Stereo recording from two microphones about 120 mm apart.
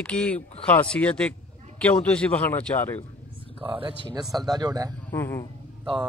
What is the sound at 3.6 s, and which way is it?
Speech, 45° right (ahead or behind).